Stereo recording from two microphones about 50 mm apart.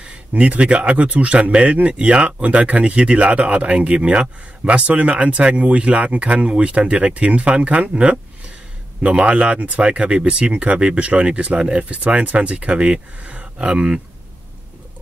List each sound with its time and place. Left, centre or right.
0.0 s speech: right